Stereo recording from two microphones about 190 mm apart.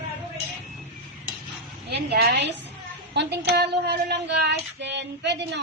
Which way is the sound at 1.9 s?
55° right (ahead or behind).